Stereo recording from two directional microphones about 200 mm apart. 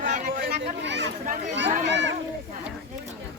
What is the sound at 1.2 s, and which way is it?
Speech, 40° right (ahead or behind).